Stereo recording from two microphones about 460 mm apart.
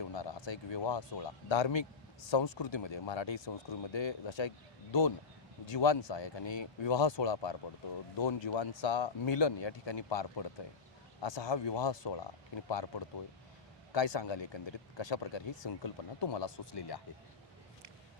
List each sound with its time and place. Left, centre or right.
0.1 s speech: left